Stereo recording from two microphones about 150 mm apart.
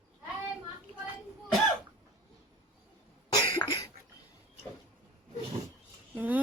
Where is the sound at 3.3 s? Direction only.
30° left (ahead or behind).